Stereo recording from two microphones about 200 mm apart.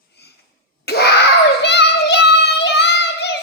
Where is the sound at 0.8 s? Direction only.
55° left (ahead or behind).